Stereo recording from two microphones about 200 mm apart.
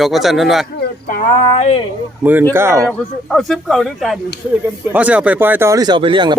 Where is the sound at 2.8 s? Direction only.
5° left (ahead or behind).